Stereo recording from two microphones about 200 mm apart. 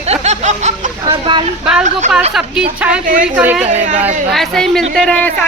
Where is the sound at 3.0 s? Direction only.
45° right (ahead or behind).